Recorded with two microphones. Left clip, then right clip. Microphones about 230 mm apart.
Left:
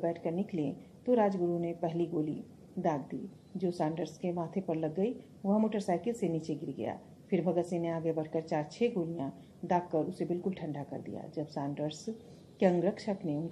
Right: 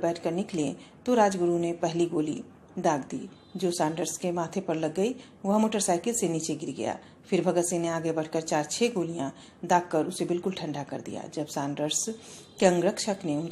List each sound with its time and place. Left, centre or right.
0.0 s a woman's voice: right
3.5 s a woman's voice: right